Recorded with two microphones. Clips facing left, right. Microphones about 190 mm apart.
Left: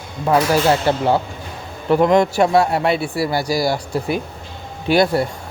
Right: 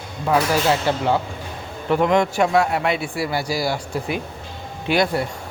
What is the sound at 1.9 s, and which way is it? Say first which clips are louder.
Speech: left 4 dB; 35° left (ahead or behind).